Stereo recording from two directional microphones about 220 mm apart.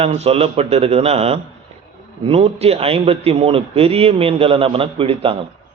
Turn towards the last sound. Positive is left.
turn(degrees=-25)  # may be behind; listen again after turning